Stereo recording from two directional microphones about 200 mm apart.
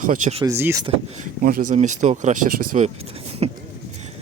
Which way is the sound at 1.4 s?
45° right (ahead or behind).